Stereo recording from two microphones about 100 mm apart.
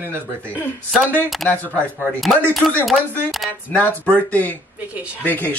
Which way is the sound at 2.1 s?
Centre (ahead or behind).